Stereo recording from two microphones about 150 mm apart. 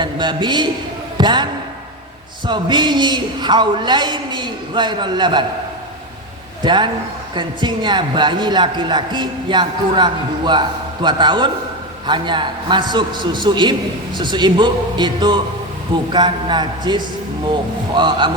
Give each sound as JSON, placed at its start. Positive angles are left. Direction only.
{"t": 0.0, "sound": "a man's voice", "side_deg": -30}
{"t": 2.5, "sound": "a man's voice", "side_deg": -30}
{"t": 6.6, "sound": "a man's voice", "side_deg": -30}